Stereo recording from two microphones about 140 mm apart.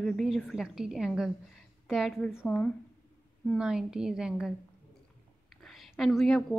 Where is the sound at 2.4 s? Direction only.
10° left (ahead or behind).